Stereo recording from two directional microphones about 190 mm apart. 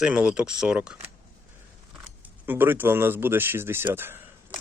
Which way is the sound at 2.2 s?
10° right (ahead or behind).